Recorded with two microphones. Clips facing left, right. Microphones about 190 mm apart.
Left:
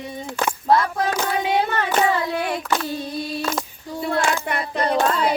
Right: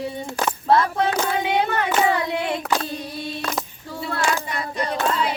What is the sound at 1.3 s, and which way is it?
Child singing, 20° right (ahead or behind).